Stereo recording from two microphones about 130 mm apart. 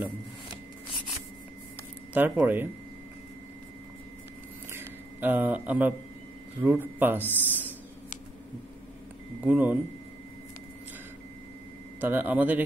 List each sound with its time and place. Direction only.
2.1 s speech: 15° right (ahead or behind)
4.7 s speech: 15° right (ahead or behind)
7.4 s a sound: 15° right (ahead or behind)
9.4 s speech: 10° right (ahead or behind)
12.0 s speech: 15° right (ahead or behind)